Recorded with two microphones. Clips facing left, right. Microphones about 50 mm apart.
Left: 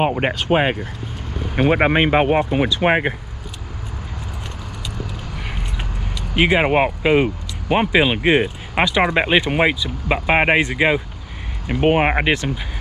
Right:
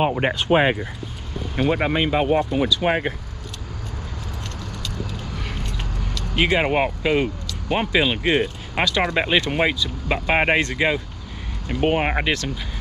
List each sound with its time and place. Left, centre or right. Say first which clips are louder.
0.0 s speech: left 1 dB; left
1.5 s speech: left 5 dB; left
5.8 s speech: left 1 dB; centre